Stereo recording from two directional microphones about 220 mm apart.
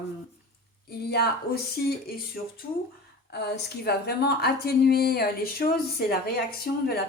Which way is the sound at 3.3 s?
50° left (ahead or behind).